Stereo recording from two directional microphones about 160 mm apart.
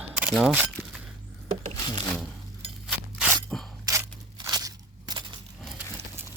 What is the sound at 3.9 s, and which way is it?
Crunch, 25° right (ahead or behind).